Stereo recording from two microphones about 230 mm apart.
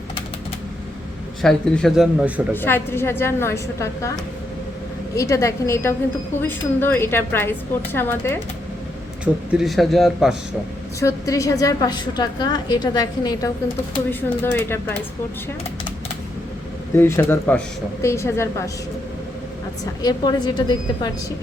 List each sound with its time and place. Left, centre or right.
1.4 s speech: centre
2.5 s a woman's voice: centre
5.1 s a woman's voice: centre
9.2 s speech: centre
11.0 s a woman's voice: centre
16.9 s a woman's voice: centre
20.0 s a woman's voice: centre